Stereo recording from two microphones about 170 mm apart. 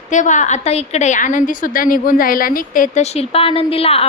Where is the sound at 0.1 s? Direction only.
45° left (ahead or behind).